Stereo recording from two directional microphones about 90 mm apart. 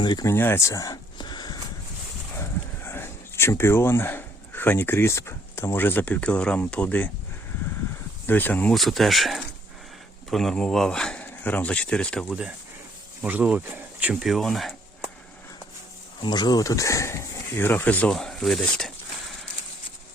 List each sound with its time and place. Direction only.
0.0 s speech: 55° left (ahead or behind)
0.3 s speech: 25° left (ahead or behind)
1.2 s a sound: 55° left (ahead or behind)
2.4 s speech: 25° left (ahead or behind)
8.3 s speech: 20° left (ahead or behind)
8.7 s speech: centre (ahead or behind)
12.2 s speech: 5° right (ahead or behind)
13.2 s speech: 15° right (ahead or behind); by 14.8 s 5° left (ahead or behind)
16.2 s speech: 50° left (ahead or behind); by 18.1 s 15° left (ahead or behind)
18.1 s speech: 5° left (ahead or behind)